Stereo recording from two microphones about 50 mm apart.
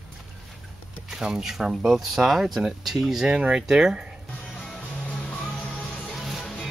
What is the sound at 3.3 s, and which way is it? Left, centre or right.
Speech, centre.